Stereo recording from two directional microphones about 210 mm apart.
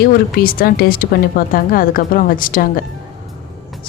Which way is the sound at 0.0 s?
45° left (ahead or behind).